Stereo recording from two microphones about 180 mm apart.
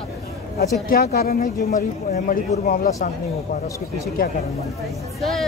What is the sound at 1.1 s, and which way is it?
Speech, 45° left (ahead or behind).